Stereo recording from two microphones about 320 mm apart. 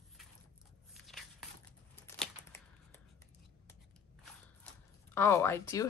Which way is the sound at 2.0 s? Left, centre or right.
Centre.